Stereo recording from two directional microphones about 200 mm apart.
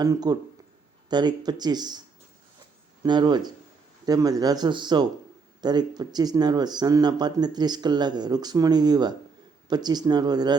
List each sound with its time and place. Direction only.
0.0 s speech: 20° right (ahead or behind)
3.0 s speech: 20° right (ahead or behind)